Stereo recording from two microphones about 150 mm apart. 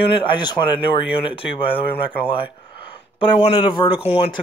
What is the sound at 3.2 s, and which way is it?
Speech, 40° left (ahead or behind).